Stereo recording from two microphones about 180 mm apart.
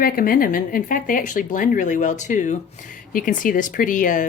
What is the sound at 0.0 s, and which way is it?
Speech, 55° left (ahead or behind).